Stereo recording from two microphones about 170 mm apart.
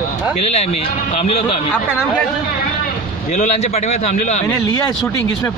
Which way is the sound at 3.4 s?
40° left (ahead or behind).